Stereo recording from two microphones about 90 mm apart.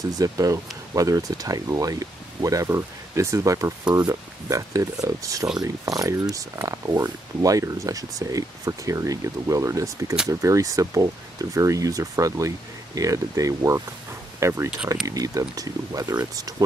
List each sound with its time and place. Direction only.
0.2 s speech: 40° right (ahead or behind)